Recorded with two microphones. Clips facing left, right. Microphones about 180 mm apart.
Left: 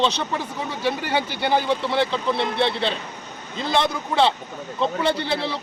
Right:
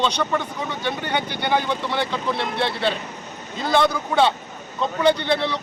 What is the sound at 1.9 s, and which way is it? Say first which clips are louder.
Speech: left 2 dB; 25° left (ahead or behind).